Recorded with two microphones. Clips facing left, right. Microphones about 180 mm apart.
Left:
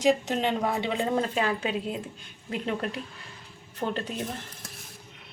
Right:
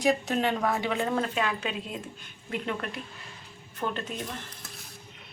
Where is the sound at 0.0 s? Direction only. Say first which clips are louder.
Left 1 dB; 20° left (ahead or behind).